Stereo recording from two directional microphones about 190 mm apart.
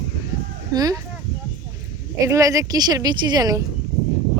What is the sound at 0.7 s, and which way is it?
Speech, 20° right (ahead or behind).